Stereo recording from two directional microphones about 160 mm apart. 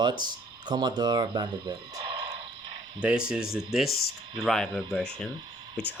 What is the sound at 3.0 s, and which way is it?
Speech, 5° right (ahead or behind).